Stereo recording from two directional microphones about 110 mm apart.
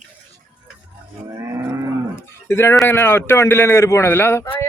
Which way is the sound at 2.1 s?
20° left (ahead or behind).